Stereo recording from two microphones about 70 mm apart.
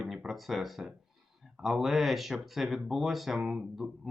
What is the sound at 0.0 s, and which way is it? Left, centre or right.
Speech, centre.